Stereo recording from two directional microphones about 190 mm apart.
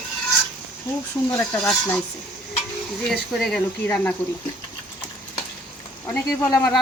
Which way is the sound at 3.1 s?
Centre (ahead or behind).